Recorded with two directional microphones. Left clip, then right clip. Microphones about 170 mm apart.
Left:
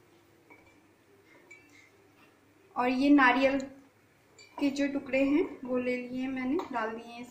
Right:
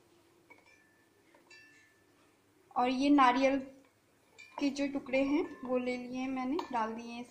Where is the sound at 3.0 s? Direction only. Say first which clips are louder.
Left 3 dB; 35° right (ahead or behind).